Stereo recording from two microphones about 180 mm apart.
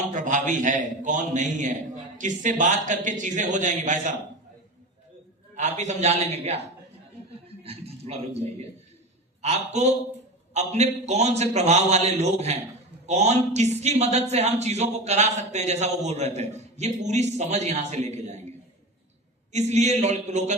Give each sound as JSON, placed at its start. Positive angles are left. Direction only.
{"t": 0.0, "sound": "speech", "side_deg": -45}
{"t": 5.5, "sound": "speech", "side_deg": -40}
{"t": 7.6, "sound": "a man's voice", "side_deg": -35}
{"t": 19.5, "sound": "speech", "side_deg": -40}